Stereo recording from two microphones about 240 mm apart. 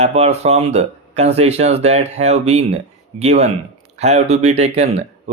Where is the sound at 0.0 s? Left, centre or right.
Right.